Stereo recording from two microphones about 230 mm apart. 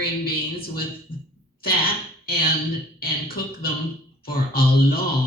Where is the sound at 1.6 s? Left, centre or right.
Left.